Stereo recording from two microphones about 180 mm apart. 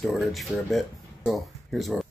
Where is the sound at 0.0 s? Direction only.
Centre (ahead or behind).